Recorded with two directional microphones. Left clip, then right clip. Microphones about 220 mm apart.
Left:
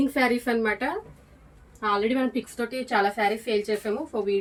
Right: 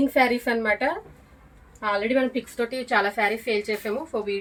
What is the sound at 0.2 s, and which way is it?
A woman's voice, 20° left (ahead or behind).